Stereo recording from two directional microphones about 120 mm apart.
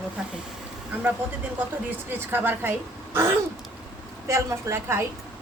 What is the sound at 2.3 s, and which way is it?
Speech, 15° right (ahead or behind).